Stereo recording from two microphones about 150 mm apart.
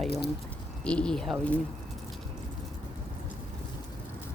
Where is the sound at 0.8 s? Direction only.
5° left (ahead or behind).